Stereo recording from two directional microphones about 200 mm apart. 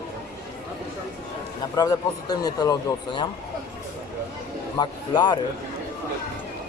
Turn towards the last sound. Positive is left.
turn(degrees=20)  # may be behind; listen again after turning